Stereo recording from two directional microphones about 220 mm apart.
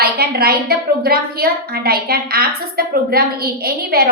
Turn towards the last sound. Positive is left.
turn(degrees=-45)  # may be behind; listen again after turning